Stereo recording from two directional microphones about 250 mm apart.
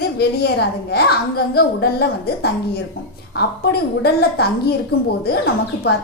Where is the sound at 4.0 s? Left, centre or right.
Left.